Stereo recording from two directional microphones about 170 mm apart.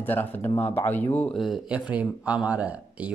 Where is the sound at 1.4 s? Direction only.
5° right (ahead or behind).